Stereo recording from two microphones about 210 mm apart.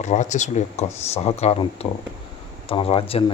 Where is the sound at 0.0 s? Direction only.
35° left (ahead or behind).